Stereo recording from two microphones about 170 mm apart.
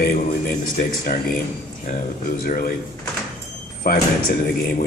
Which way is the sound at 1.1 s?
60° left (ahead or behind).